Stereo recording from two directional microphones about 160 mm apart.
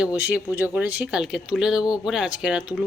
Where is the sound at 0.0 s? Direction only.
10° right (ahead or behind).